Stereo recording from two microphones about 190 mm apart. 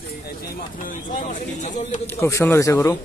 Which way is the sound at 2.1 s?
15° left (ahead or behind).